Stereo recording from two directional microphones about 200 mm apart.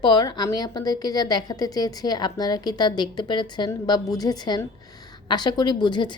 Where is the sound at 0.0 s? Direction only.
20° left (ahead or behind).